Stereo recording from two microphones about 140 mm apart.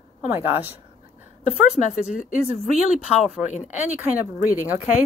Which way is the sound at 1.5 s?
55° left (ahead or behind).